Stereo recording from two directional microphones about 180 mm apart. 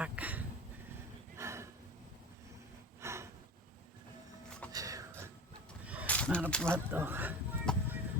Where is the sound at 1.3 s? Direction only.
15° right (ahead or behind).